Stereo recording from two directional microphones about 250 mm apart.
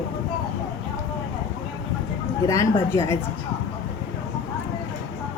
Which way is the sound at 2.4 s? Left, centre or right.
Centre.